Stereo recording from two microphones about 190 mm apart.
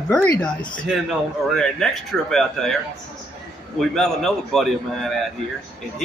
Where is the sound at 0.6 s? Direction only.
25° left (ahead or behind).